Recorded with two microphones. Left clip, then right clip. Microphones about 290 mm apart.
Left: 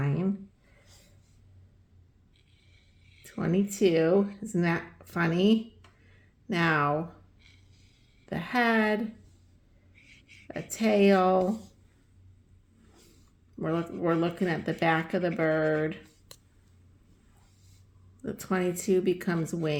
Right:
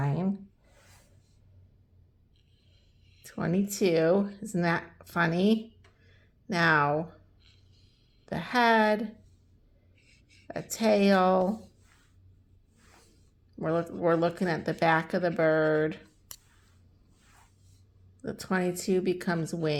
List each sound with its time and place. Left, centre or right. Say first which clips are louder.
3.2 s speech: left 1 dB; centre
8.3 s speech: right 2 dB; centre
10.4 s speech: right 2 dB; centre
13.6 s speech: right 2 dB; centre
18.2 s speech: even; centre